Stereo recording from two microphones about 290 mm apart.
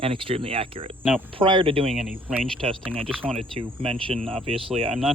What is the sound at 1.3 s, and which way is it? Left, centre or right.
Cricket, centre.